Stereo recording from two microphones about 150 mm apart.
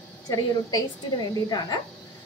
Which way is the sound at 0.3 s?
25° left (ahead or behind).